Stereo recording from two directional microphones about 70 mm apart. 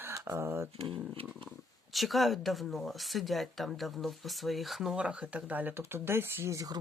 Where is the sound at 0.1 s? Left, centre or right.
Right.